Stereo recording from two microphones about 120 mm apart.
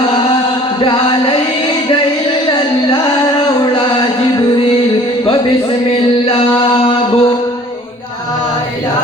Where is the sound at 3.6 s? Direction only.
40° left (ahead or behind).